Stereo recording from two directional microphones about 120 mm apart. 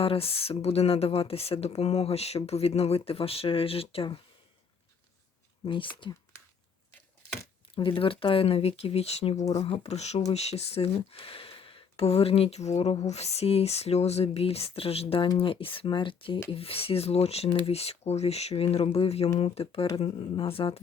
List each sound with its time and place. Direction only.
0.0 s speech: 50° left (ahead or behind)
5.6 s speech: 45° left (ahead or behind)
7.8 s speech: 50° left (ahead or behind)